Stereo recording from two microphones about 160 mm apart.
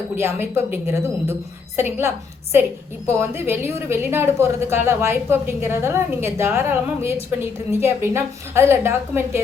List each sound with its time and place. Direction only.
0.2 s a woman's voice: 15° right (ahead or behind)